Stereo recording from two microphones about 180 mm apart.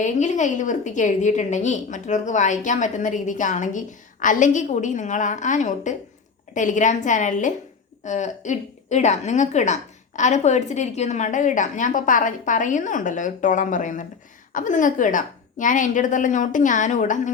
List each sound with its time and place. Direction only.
0.0 s a woman's voice: 40° left (ahead or behind)